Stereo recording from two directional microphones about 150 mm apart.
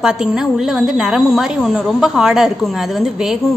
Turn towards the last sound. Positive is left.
turn(degrees=0)  # may be behind; listen again after turning